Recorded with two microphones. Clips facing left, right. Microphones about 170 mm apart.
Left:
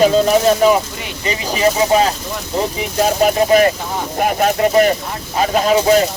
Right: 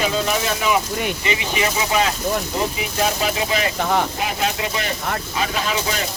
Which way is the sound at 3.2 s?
50° left (ahead or behind).